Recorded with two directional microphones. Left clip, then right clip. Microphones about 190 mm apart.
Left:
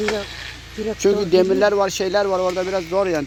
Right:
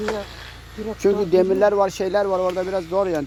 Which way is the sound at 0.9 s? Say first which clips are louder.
Left 1 dB; 5° right (ahead or behind).